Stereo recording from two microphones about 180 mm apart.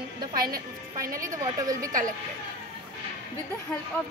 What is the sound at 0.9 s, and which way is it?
Speech, 20° right (ahead or behind).